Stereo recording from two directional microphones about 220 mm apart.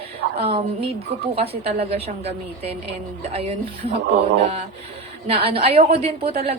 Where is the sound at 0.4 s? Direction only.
25° right (ahead or behind).